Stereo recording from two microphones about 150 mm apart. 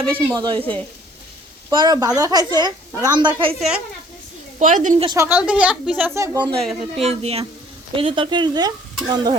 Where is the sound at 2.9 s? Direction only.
25° right (ahead or behind).